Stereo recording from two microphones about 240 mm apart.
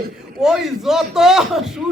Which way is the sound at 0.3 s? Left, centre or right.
Centre.